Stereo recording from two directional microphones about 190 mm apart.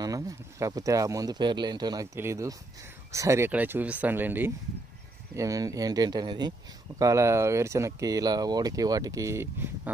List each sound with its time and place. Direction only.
0.0 s speech: 15° right (ahead or behind)